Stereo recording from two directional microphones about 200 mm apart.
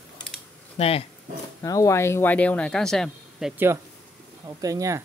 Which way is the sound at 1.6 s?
15° left (ahead or behind).